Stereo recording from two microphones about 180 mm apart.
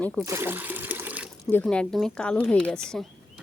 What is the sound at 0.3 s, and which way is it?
Water, 15° right (ahead or behind).